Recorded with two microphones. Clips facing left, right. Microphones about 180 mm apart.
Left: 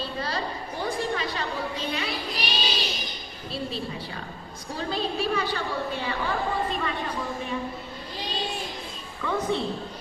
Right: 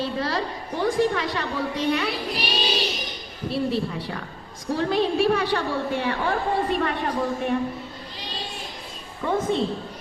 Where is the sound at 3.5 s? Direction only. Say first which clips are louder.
Right 7 dB; 65° right (ahead or behind).